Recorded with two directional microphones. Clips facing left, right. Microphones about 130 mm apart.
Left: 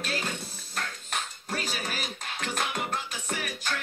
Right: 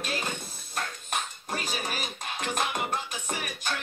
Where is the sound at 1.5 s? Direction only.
20° right (ahead or behind).